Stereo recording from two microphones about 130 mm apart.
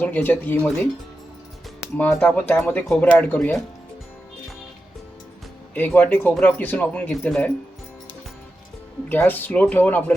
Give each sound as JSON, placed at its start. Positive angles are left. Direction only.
{"t": 0.0, "sound": "speech", "side_deg": 15}
{"t": 2.0, "sound": "speech", "side_deg": 15}
{"t": 5.7, "sound": "speech", "side_deg": 15}
{"t": 9.0, "sound": "speech", "side_deg": 15}